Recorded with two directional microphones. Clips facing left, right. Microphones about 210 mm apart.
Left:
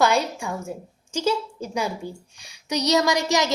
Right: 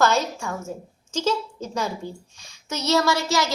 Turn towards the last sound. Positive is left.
turn(degrees=20)  # may be behind; listen again after turning